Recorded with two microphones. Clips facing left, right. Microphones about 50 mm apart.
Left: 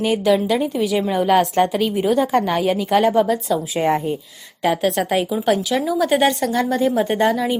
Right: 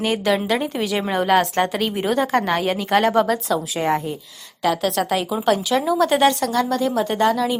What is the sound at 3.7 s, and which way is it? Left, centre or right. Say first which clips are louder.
A woman's voice: left 2 dB; left.